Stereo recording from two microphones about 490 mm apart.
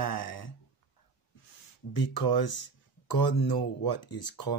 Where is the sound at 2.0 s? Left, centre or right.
Left.